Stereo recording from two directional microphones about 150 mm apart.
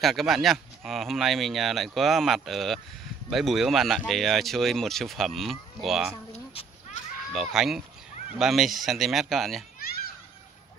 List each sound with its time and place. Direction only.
0.0 s speech: centre (ahead or behind)
7.3 s speech: 5° right (ahead or behind)
9.8 s children playing: 90° left